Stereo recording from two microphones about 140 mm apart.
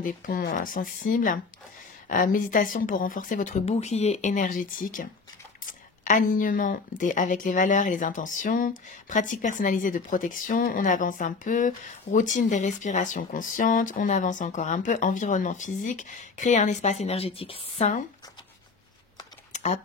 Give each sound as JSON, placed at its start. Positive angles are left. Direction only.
{"t": 0.0, "sound": "speech", "side_deg": 80}
{"t": 5.7, "sound": "a sound", "side_deg": 70}
{"t": 7.0, "sound": "speech", "side_deg": 65}
{"t": 19.5, "sound": "typing", "side_deg": 55}